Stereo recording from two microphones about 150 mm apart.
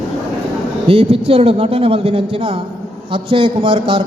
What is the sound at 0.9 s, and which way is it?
Speech, 40° right (ahead or behind).